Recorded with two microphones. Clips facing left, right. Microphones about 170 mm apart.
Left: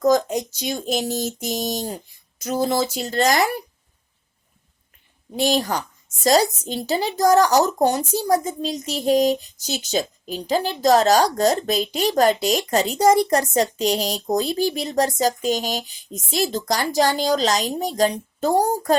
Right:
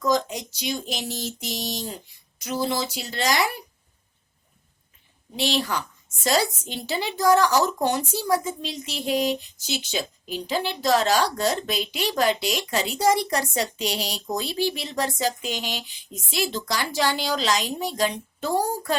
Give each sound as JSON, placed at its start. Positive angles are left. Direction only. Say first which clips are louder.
{"t": 0.0, "sound": "speech", "louder": "left 6 dB", "side_deg": 45}
{"t": 5.4, "sound": "speech", "louder": "left 5 dB", "side_deg": 45}